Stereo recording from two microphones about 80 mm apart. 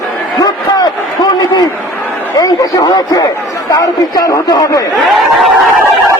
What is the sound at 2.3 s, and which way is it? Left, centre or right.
A man's voice, left.